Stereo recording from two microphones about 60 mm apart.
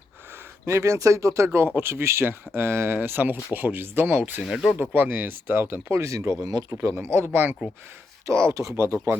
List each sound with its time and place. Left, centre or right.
0.6 s speech: right
1.5 s speech: right
4.4 s speech: centre
4.9 s speech: right
6.4 s speech: right
6.9 s speech: right
8.3 s speech: right
8.7 s speech: right